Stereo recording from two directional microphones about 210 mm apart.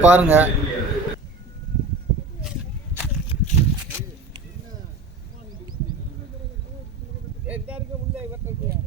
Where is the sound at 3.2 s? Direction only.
30° left (ahead or behind).